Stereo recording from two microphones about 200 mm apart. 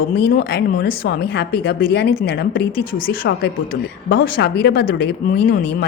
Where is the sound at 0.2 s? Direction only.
55° left (ahead or behind).